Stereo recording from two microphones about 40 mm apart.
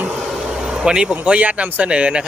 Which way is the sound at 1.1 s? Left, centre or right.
Right.